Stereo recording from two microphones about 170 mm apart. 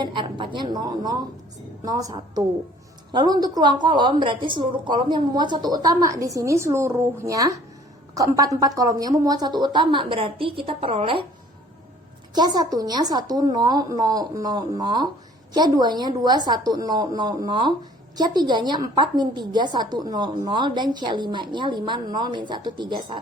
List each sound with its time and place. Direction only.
0.0 s a woman's voice: 30° right (ahead or behind)
12.3 s a woman's voice: 25° right (ahead or behind)